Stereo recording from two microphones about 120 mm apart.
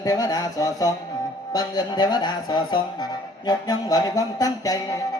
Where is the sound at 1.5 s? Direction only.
35° left (ahead or behind).